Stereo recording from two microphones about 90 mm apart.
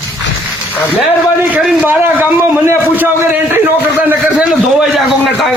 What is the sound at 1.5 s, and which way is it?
Speech, 20° right (ahead or behind).